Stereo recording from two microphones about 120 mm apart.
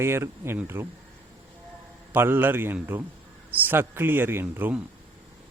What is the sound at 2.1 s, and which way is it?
A man's voice, 15° right (ahead or behind).